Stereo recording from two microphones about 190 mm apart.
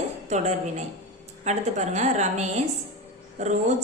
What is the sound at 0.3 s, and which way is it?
A woman's voice, 40° right (ahead or behind).